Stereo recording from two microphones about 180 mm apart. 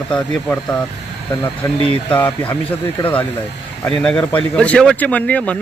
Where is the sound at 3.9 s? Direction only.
5° left (ahead or behind).